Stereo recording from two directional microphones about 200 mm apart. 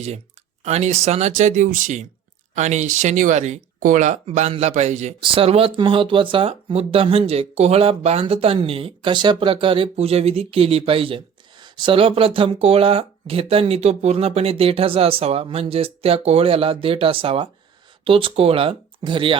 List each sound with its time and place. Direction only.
0.6 s speech: 35° right (ahead or behind)